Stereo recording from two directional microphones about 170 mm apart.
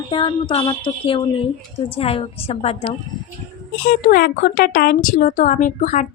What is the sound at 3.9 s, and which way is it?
A woman's voice, 60° left (ahead or behind).